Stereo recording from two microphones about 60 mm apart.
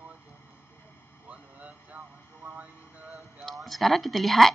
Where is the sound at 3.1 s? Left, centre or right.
Centre.